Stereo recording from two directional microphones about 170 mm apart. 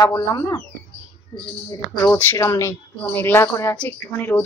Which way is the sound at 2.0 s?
10° left (ahead or behind).